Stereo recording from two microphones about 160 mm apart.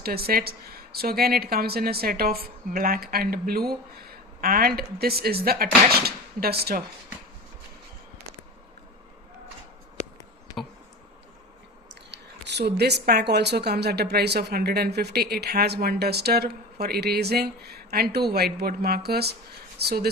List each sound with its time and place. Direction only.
0.0 s a woman's voice: 70° right (ahead or behind)
12.1 s speech: 90° right